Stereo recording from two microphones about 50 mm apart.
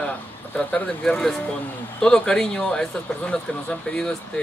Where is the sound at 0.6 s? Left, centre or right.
Left.